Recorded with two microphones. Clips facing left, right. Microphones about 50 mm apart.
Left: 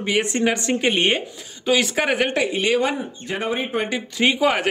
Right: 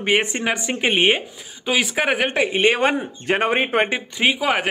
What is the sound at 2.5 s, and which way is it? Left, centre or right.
Speech, right.